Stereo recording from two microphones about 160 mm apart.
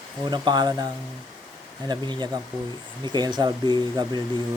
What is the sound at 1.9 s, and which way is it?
Speech, 25° right (ahead or behind).